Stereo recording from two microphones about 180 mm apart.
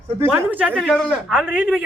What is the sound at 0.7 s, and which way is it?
Speech, 5° left (ahead or behind).